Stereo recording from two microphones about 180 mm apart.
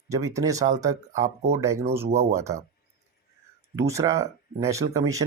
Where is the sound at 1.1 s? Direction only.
45° right (ahead or behind).